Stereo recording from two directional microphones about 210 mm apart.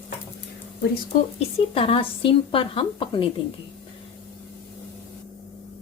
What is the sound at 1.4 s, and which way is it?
A woman's voice, 25° left (ahead or behind).